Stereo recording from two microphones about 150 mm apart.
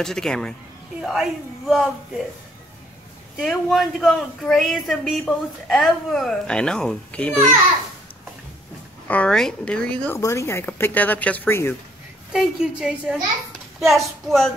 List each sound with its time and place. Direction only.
0.0 s a woman's voice: 5° left (ahead or behind)
3.3 s a woman's voice: centre (ahead or behind)
9.0 s speech: 10° left (ahead or behind)
10.1 s speech: 20° left (ahead or behind)
12.3 s a woman's voice: 5° right (ahead or behind)